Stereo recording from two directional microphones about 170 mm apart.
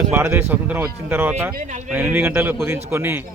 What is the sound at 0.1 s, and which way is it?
Speech, 15° right (ahead or behind).